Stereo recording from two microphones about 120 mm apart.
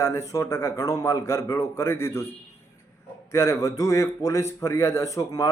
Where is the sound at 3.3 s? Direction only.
25° left (ahead or behind).